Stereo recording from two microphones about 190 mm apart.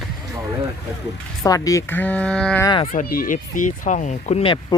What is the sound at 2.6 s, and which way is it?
Speech, 25° left (ahead or behind).